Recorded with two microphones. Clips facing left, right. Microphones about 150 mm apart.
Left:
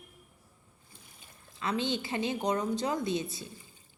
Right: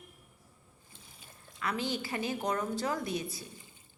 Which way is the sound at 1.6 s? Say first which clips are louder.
Left 3 dB; 25° left (ahead or behind).